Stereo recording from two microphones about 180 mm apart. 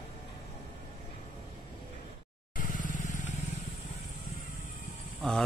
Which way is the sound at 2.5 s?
50° left (ahead or behind).